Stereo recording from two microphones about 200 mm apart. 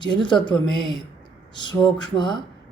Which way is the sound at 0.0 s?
20° left (ahead or behind).